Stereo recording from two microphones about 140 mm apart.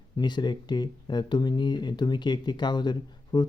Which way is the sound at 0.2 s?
30° left (ahead or behind).